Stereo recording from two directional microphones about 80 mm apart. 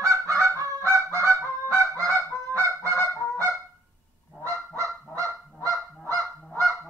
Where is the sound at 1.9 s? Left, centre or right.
Right.